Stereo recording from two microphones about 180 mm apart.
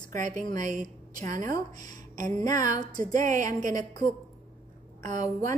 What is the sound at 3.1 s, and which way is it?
Speech, 45° right (ahead or behind).